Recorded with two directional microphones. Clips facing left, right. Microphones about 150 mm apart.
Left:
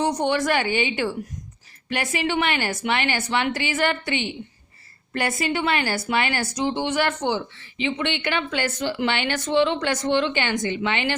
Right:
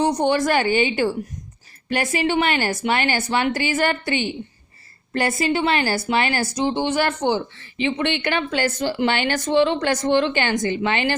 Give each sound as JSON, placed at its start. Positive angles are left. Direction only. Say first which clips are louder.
{"t": 0.0, "sound": "speech", "louder": "right 3 dB", "side_deg": -35}
{"t": 7.6, "sound": "speech", "louder": "right 3 dB", "side_deg": -45}